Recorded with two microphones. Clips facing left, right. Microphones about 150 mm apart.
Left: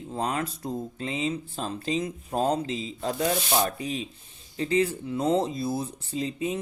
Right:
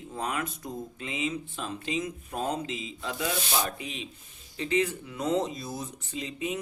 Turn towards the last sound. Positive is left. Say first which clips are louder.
# left 4 dB
turn(degrees=35)  # may be behind; listen again after turning